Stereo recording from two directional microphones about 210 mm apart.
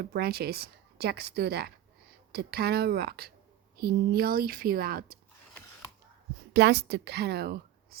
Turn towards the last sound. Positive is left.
turn(degrees=-50)  # may be behind; listen again after turning